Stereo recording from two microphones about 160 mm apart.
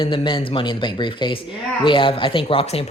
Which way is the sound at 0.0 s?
30° left (ahead or behind).